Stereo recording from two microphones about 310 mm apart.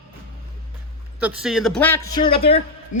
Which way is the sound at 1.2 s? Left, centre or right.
Centre.